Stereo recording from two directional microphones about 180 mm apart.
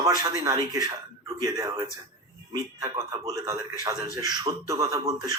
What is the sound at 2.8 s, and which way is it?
A man's voice, 20° right (ahead or behind).